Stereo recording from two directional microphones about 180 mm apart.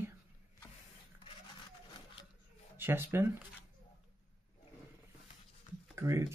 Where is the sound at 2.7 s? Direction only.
10° right (ahead or behind).